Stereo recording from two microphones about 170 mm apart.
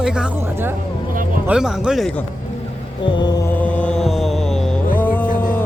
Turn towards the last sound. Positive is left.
turn(degrees=10)  # may be behind; listen again after turning